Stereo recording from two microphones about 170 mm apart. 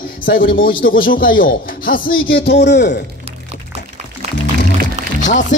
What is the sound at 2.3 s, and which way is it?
Music, 90° left.